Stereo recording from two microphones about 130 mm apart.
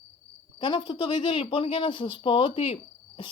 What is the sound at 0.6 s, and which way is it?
Speech, 40° left (ahead or behind).